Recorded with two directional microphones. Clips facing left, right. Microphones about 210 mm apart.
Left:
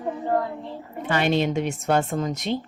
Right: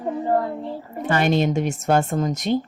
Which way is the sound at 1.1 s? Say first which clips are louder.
Right 2 dB; 45° right (ahead or behind).